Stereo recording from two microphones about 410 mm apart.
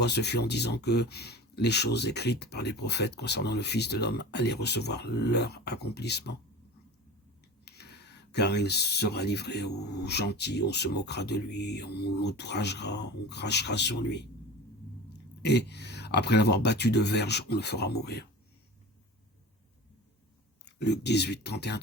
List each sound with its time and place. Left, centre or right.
0.0 s speech: left
7.6 s speech: left
20.7 s speech: left